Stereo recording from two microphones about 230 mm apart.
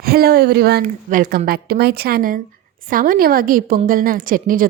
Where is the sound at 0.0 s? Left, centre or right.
Right.